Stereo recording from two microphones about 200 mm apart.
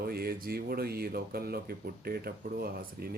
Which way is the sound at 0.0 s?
50° right (ahead or behind).